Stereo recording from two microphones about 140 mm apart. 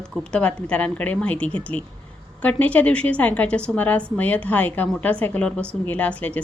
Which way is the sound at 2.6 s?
10° left (ahead or behind).